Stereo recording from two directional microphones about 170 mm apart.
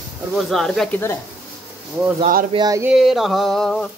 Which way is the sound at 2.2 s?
55° right (ahead or behind).